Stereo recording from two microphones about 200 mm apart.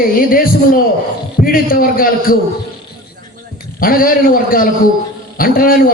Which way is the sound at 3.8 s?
45° left (ahead or behind).